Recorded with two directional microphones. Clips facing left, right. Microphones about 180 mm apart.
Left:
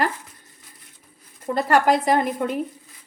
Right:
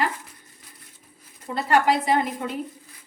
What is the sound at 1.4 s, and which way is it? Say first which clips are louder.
Speech: left 2 dB; 45° left (ahead or behind).